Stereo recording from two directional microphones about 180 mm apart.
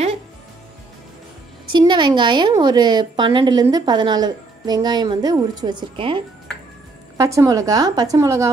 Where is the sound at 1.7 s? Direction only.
25° right (ahead or behind).